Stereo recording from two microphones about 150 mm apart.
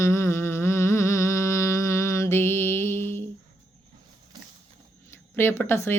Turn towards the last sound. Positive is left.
turn(degrees=15)  # may be behind; listen again after turning